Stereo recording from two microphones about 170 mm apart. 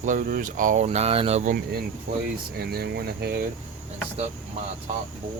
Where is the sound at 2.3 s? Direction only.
65° right (ahead or behind).